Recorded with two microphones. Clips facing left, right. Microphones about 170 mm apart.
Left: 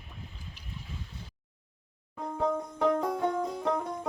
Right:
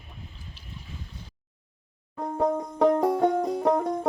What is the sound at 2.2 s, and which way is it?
Music, 45° right (ahead or behind).